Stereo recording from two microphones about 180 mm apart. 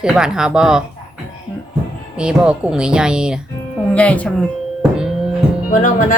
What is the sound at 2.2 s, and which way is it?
Speech, 5° right (ahead or behind).